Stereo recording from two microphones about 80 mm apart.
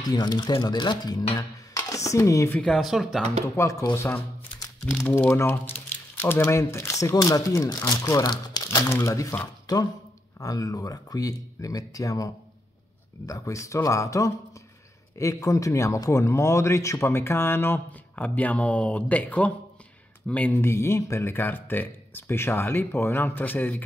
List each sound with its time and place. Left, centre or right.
0.0 s speech: left
2.6 s speech: centre
3.6 s speech: left
8.8 s speech: left
9.7 s speech: left
13.3 s speech: left